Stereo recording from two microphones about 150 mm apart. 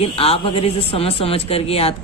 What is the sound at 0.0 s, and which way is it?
Speech, 40° left (ahead or behind).